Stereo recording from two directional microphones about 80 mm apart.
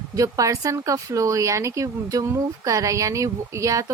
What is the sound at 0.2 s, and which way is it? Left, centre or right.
A woman's voice, right.